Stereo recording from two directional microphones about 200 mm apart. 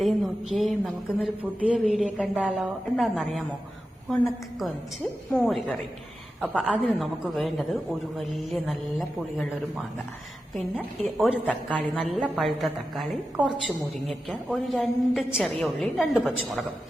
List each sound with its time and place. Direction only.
0.0 s a woman's voice: centre (ahead or behind)
5.4 s a woman's voice: centre (ahead or behind)
10.8 s a woman's voice: centre (ahead or behind)